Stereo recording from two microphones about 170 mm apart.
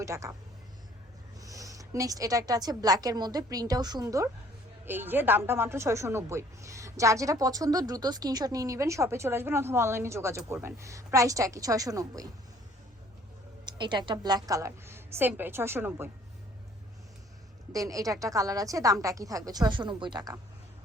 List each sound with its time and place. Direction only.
0.0 s a woman's voice: 20° right (ahead or behind)
1.4 s a woman's voice: 20° right (ahead or behind)
13.7 s a woman's voice: 25° right (ahead or behind)
17.7 s a woman's voice: 20° right (ahead or behind)